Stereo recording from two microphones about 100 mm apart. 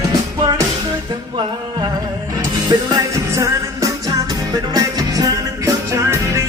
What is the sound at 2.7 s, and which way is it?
Music, 40° right (ahead or behind).